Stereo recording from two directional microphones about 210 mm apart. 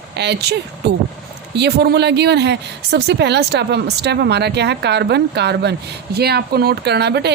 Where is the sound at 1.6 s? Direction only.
50° right (ahead or behind).